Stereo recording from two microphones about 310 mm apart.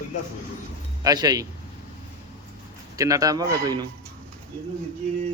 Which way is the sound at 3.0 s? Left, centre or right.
Centre.